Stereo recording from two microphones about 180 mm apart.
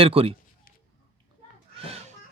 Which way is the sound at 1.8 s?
35° right (ahead or behind).